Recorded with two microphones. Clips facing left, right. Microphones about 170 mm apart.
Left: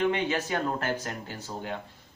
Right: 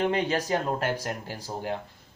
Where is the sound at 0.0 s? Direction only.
35° right (ahead or behind).